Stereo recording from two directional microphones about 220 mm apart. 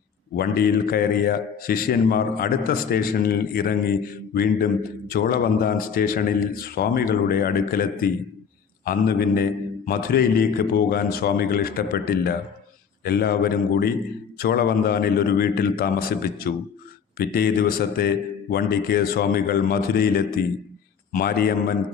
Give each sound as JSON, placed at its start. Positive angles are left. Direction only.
{"t": 0.3, "sound": "a man's voice", "side_deg": 45}